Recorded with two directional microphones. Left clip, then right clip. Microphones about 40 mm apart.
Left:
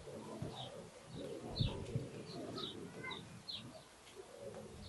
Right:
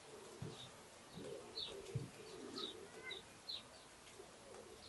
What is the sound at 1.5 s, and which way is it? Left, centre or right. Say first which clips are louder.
Bird: left 3 dB; centre.